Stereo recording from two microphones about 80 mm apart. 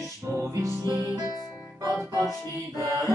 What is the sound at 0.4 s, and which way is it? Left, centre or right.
Music, right.